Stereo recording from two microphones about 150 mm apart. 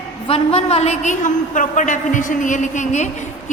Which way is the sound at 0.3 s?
40° left (ahead or behind).